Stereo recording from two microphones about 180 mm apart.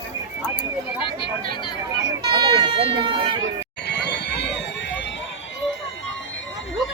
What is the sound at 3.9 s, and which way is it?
Fire alarm, 65° left (ahead or behind).